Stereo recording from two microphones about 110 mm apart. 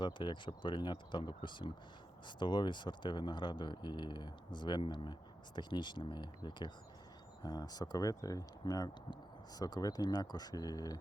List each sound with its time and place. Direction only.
0.0 s speech: 45° left (ahead or behind)